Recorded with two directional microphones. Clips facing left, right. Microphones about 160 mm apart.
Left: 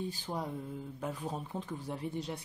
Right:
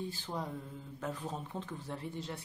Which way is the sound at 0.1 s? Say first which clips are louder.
Left 2 dB; 15° left (ahead or behind).